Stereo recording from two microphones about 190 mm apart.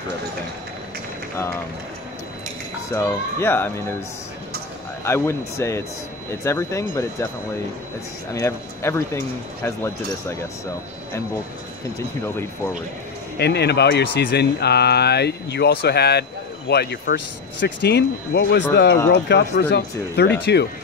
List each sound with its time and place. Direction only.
2.9 s speech: 15° left (ahead or behind)
5.0 s speech: 15° left (ahead or behind)
8.4 s speech: 15° left (ahead or behind)
13.4 s speech: 60° left (ahead or behind)